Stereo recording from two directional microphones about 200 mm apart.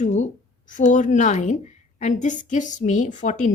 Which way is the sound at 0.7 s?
40° left (ahead or behind).